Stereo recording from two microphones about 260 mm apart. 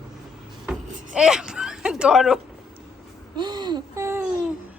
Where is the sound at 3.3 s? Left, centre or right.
Centre.